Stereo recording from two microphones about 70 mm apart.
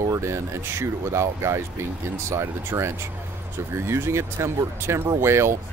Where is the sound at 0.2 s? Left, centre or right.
Right.